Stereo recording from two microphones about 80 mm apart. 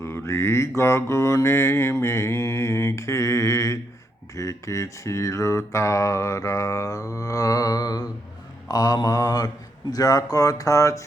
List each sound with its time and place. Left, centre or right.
0.0 s mantra: left
8.6 s speech: left